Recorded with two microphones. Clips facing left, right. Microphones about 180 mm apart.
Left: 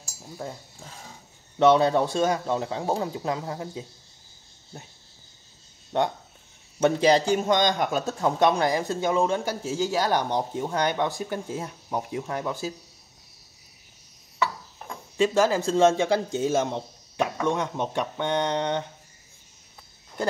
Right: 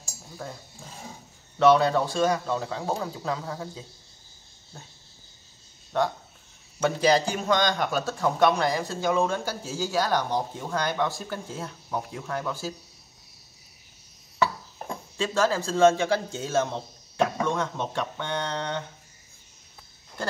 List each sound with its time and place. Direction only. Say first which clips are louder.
0.4 s a man's voice: left 2 dB; 20° left (ahead or behind)
1.6 s a man's voice: left 1 dB; 20° left (ahead or behind)
5.9 s a man's voice: left 1 dB; 20° left (ahead or behind)
14.8 s a sound: right 4 dB; 45° right (ahead or behind)
15.1 s a man's voice: left 4 dB; 15° left (ahead or behind)